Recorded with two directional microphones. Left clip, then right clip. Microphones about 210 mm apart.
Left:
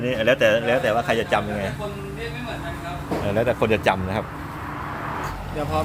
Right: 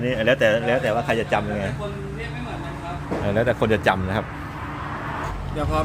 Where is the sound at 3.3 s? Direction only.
5° right (ahead or behind).